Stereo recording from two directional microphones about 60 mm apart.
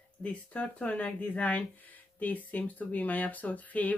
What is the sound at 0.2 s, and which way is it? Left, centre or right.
A woman's voice, left.